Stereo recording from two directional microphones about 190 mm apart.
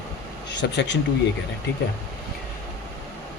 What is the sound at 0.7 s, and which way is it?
Speech, 65° left (ahead or behind).